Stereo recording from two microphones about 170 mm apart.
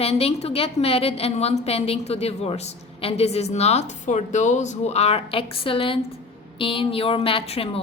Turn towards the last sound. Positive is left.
turn(degrees=35)  # may be behind; listen again after turning